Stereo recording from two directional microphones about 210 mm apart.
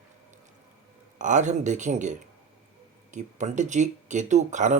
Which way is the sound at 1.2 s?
35° right (ahead or behind).